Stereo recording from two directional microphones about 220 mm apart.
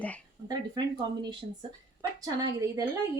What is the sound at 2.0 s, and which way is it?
Speech, 15° right (ahead or behind).